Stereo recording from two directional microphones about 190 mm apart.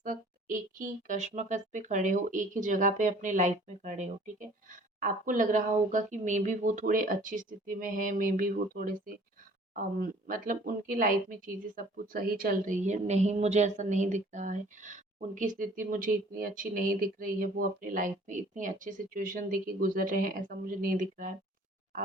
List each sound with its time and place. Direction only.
0.0 s a woman's voice: 45° right (ahead or behind)